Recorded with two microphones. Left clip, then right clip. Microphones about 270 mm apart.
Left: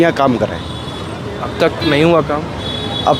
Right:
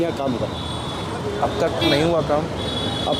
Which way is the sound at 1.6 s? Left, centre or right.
Left.